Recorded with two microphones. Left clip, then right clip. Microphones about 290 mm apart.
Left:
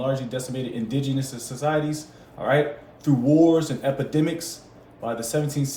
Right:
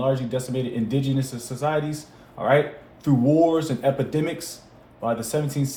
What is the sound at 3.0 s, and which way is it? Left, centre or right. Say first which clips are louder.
Speech: left 1 dB; right.